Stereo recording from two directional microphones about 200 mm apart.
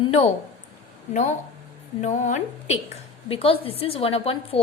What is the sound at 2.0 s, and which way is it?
A woman's voice, 35° left (ahead or behind).